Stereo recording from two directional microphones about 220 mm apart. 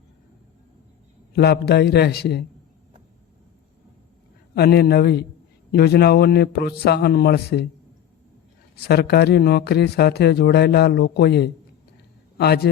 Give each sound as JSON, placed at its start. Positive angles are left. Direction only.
{"t": 1.3, "sound": "speech", "side_deg": 45}
{"t": 4.5, "sound": "speech", "side_deg": 45}
{"t": 8.8, "sound": "speech", "side_deg": 45}